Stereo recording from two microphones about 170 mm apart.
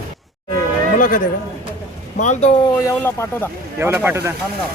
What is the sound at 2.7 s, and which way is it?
Speech, 15° left (ahead or behind).